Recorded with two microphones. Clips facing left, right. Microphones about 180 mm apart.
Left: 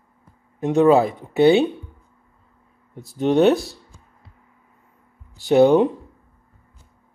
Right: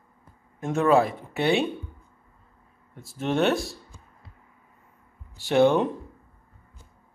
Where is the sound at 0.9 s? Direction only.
20° left (ahead or behind).